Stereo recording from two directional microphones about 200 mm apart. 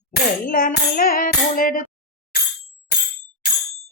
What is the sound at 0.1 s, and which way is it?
Tambourine, 45° left (ahead or behind).